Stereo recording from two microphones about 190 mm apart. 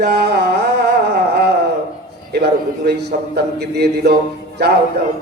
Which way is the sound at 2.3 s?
60° right (ahead or behind).